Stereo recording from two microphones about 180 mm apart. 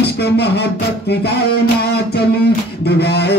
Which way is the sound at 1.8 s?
65° left (ahead or behind).